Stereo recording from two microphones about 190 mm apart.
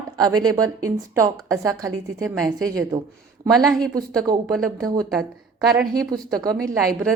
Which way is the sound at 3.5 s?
Centre (ahead or behind).